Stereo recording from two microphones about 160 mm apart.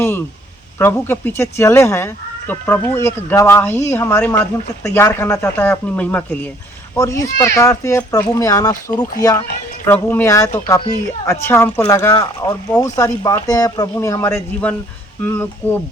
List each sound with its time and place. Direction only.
0.8 s speech: 15° left (ahead or behind)